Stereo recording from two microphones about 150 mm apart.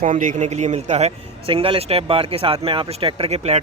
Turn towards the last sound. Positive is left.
turn(degrees=-45)  # may be behind; listen again after turning